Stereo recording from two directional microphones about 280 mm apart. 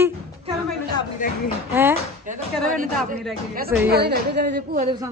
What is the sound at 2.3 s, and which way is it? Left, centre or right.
Speech, right.